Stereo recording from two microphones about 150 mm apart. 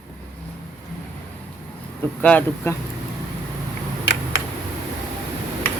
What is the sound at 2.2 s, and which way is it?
Speech, 10° left (ahead or behind).